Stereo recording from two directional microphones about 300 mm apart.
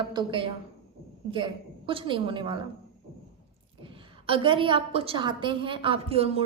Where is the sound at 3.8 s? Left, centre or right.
Centre.